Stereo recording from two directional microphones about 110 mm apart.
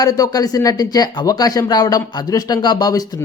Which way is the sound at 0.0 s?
35° left (ahead or behind).